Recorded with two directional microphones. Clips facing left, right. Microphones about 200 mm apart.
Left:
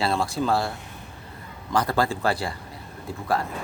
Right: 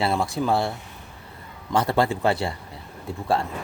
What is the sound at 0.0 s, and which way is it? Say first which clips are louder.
Speech: right 1 dB; 20° right (ahead or behind).